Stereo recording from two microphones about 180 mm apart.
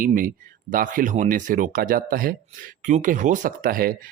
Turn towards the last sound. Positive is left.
turn(degrees=-50)  # may be behind; listen again after turning